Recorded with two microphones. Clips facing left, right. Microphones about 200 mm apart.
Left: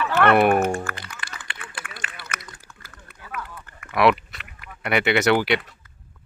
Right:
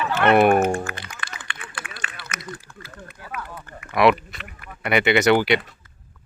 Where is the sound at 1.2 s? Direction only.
30° left (ahead or behind).